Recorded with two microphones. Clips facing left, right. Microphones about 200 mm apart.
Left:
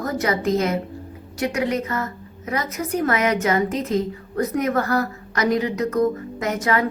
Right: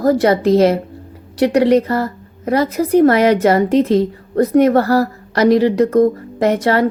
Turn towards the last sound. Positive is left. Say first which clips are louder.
# right 8 dB
turn(degrees=-35)  # may be behind; listen again after turning